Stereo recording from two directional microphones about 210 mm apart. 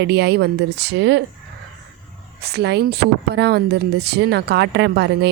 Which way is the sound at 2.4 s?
50° right (ahead or behind).